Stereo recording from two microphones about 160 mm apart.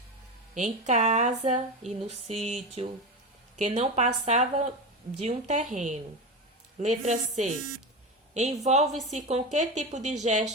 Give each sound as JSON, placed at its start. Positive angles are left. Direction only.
{"t": 0.5, "sound": "speech", "side_deg": -50}